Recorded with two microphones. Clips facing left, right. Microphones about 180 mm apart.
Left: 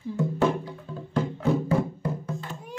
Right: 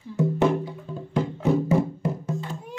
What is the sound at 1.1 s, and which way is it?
Music, 20° right (ahead or behind).